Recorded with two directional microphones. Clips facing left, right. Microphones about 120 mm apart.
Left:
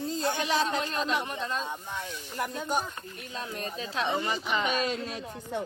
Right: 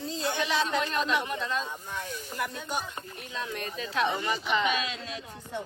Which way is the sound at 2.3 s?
40° left (ahead or behind).